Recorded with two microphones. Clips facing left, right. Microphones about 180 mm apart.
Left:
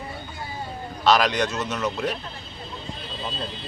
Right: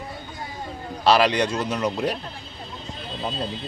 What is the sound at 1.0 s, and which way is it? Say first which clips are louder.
Speech: right 2 dB; 30° right (ahead or behind).